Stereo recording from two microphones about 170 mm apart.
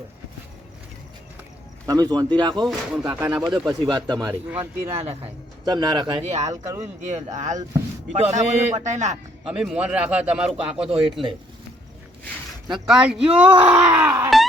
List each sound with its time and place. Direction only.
1.9 s speech: 20° right (ahead or behind)
2.6 s speech: 5° right (ahead or behind)
3.6 s speech: 20° right (ahead or behind)
4.3 s speech: 15° right (ahead or behind)
4.9 s speech: 35° right (ahead or behind)
5.6 s speech: 25° right (ahead or behind)
6.2 s speech: 40° right (ahead or behind)
6.5 s speech: 20° right (ahead or behind)
7.0 s a man's voice: 45° right (ahead or behind)
9.5 s speech: 5° right (ahead or behind)
12.7 s speech: 5° right (ahead or behind)